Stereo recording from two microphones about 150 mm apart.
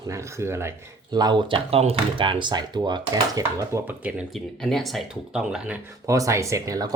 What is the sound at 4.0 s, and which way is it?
Speech, 5° right (ahead or behind).